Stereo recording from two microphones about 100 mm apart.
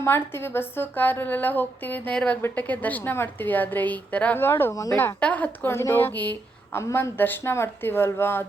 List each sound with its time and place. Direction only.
0.0 s a woman's voice: 25° left (ahead or behind)
4.7 s a woman's voice: 35° left (ahead or behind)
4.9 s a woman's voice: 15° left (ahead or behind)
5.6 s a woman's voice: 25° left (ahead or behind)